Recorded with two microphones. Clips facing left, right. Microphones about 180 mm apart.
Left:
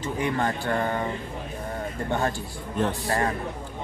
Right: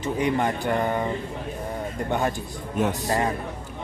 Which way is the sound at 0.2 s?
20° right (ahead or behind).